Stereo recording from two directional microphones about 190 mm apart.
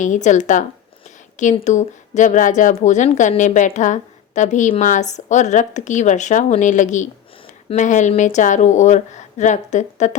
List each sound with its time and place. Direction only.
0.0 s speech: 40° left (ahead or behind)